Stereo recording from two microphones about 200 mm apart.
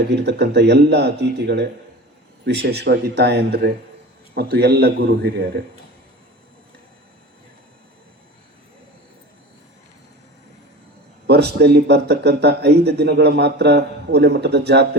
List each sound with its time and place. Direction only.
0.1 s a man's voice: 60° right (ahead or behind)
11.3 s speech: 55° right (ahead or behind)